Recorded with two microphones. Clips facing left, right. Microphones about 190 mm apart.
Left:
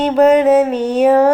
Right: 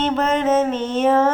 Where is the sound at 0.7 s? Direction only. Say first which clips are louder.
Left 6 dB; 40° left (ahead or behind).